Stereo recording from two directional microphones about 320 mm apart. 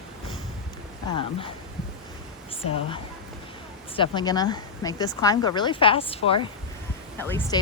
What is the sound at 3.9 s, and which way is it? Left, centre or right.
Speech, centre.